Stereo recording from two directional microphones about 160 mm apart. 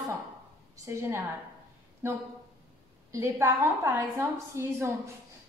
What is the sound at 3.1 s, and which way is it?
A woman's voice, 15° right (ahead or behind).